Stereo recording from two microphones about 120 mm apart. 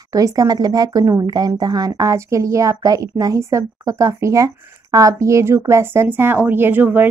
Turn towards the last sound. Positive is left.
turn(degrees=-15)  # may be behind; listen again after turning